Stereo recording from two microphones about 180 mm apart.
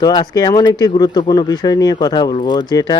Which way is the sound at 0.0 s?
20° left (ahead or behind).